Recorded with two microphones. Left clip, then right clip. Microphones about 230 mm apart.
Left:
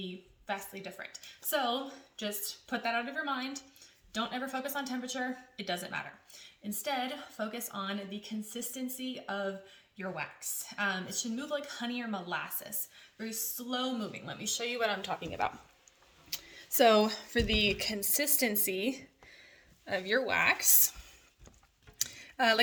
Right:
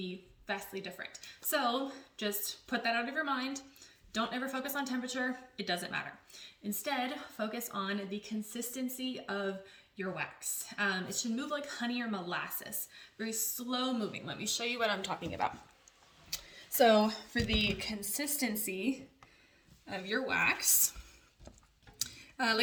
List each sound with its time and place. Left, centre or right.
0.4 s speech: centre
10.7 s speech: centre
16.3 s speech: left
22.1 s a sound: left